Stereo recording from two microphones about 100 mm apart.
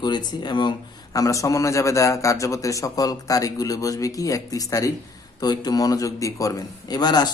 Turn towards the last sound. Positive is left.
turn(degrees=45)  # may be behind; listen again after turning